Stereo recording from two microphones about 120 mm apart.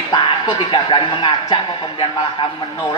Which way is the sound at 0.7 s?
40° left (ahead or behind).